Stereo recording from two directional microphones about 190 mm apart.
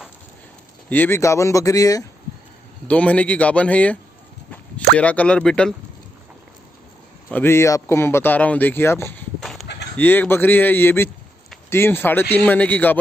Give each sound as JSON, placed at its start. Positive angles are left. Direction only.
{"t": 0.8, "sound": "a man's voice", "side_deg": 10}
{"t": 2.9, "sound": "a man's voice", "side_deg": 5}
{"t": 7.2, "sound": "a man's voice", "side_deg": 10}
{"t": 9.4, "sound": "a sound", "side_deg": 0}
{"t": 9.9, "sound": "a man's voice", "side_deg": 10}